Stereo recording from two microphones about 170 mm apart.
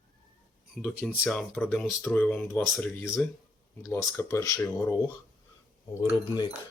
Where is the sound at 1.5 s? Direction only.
10° left (ahead or behind).